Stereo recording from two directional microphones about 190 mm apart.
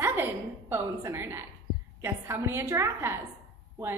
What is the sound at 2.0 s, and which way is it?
A woman's voice, 15° right (ahead or behind).